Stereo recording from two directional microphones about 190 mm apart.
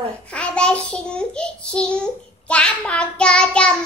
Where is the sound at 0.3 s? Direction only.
5° left (ahead or behind).